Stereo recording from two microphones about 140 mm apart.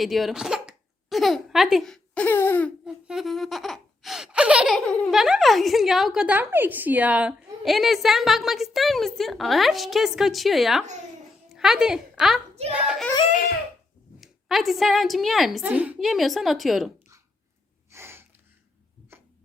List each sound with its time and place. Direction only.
0.0 s speech: centre (ahead or behind)
2.8 s laughter: 5° right (ahead or behind)
11.5 s a woman's voice: 5° right (ahead or behind)
14.2 s a woman's voice: centre (ahead or behind)
15.6 s laughter: 10° right (ahead or behind)
17.9 s gasp: 15° right (ahead or behind)